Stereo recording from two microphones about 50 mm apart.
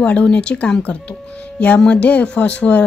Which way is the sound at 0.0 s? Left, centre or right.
Left.